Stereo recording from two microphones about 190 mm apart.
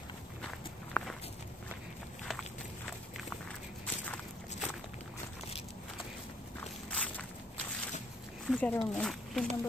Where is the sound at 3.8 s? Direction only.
5° left (ahead or behind).